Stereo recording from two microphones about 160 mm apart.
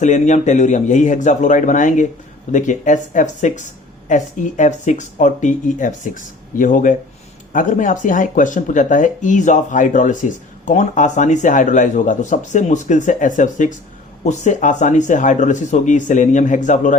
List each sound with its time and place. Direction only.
0.0 s speech: 50° left (ahead or behind)